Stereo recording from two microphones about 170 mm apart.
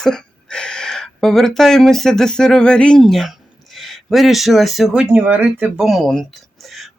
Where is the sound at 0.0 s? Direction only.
5° left (ahead or behind).